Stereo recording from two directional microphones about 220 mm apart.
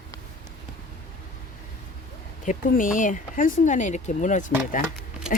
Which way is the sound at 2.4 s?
35° left (ahead or behind).